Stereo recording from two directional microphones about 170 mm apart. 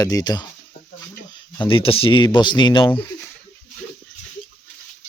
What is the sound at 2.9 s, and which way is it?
Speech, 10° left (ahead or behind).